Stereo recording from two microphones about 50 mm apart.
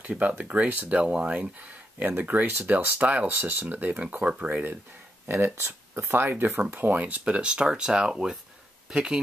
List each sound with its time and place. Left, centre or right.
0.1 s speech: centre
2.0 s speech: right
4.5 s speech: right
5.3 s speech: right
6.7 s speech: right; by 9.2 s centre